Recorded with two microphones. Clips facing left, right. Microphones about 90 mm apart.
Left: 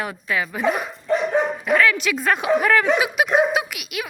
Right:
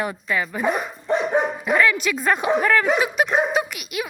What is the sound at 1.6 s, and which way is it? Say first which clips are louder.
A woman's voice: left 1 dB; 5° right (ahead or behind).